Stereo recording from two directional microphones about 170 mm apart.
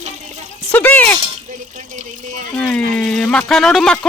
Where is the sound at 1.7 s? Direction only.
45° right (ahead or behind).